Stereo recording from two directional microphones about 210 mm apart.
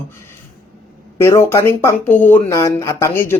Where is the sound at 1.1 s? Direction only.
15° left (ahead or behind).